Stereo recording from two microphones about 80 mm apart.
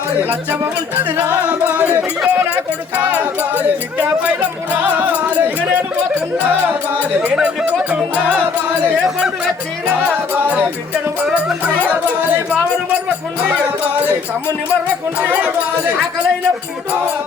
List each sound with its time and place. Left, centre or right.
0.2 s music: right
1.5 s speech: centre
7.3 s music: centre
10.0 s music: right
13.1 s speech: centre
14.0 s music: centre